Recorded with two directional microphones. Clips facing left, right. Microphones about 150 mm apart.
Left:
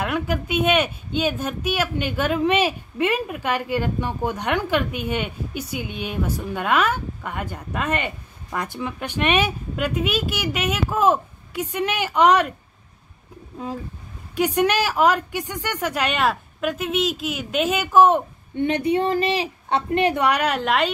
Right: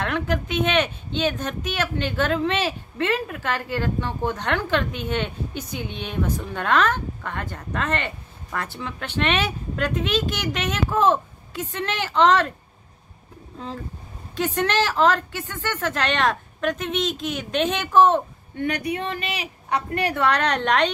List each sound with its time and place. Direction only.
0.0 s speech: 10° left (ahead or behind)
14.3 s speech: 10° left (ahead or behind)
18.6 s a woman's voice: 25° left (ahead or behind); by 20.9 s 5° left (ahead or behind)